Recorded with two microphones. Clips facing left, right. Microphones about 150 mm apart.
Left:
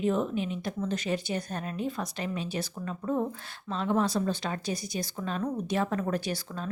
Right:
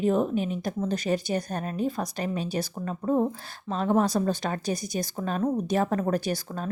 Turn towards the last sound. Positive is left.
turn(degrees=-45)  # may be behind; listen again after turning